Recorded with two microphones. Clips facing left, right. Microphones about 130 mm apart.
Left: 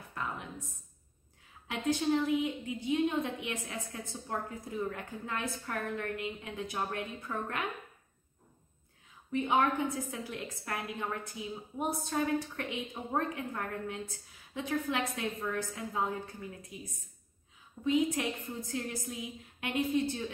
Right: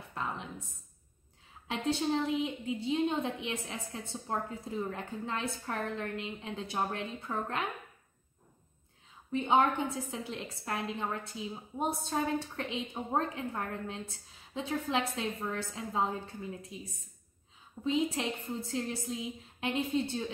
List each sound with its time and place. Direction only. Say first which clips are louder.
0.1 s a sound: right 1 dB; 25° right (ahead or behind)
1.7 s a woman's voice: left 1 dB; 25° right (ahead or behind)
9.3 s a woman's voice: right 2 dB; 25° right (ahead or behind)